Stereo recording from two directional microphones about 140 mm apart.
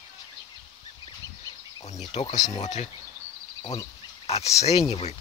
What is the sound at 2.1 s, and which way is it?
Speech, 50° left (ahead or behind).